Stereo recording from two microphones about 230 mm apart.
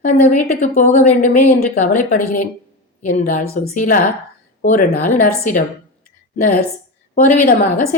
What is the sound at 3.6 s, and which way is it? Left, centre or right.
A woman's voice, left.